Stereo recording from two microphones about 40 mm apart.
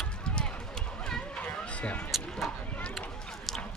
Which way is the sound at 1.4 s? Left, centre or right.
Left.